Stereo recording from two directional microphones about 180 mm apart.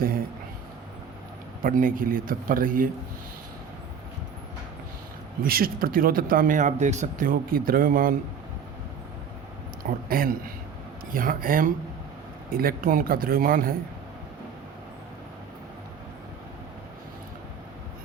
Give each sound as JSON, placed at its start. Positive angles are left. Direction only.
{"t": 1.6, "sound": "speech", "side_deg": -50}
{"t": 5.4, "sound": "speech", "side_deg": -55}
{"t": 10.1, "sound": "speech", "side_deg": -50}